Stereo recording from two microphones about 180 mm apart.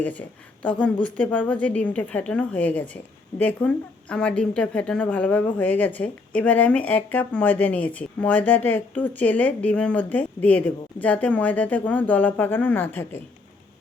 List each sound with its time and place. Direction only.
0.0 s speech: 10° left (ahead or behind)